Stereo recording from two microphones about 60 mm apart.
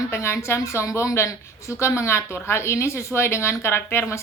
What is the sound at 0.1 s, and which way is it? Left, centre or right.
A woman's voice, left.